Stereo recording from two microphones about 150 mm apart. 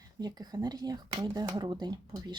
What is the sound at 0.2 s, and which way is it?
Speech, 25° right (ahead or behind).